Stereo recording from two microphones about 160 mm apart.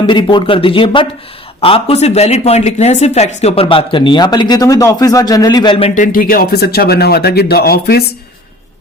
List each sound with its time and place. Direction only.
0.1 s speech: 30° left (ahead or behind)
5.9 s speech: 55° left (ahead or behind); by 8.0 s 80° left